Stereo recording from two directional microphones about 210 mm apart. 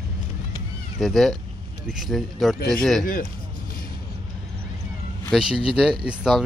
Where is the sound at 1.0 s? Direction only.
Centre (ahead or behind).